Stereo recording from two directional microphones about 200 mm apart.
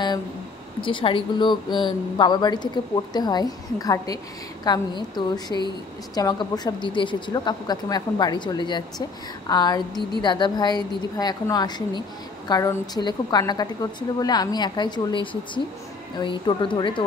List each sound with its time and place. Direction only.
0.7 s speech: 25° left (ahead or behind)
16.2 s speech: 25° left (ahead or behind)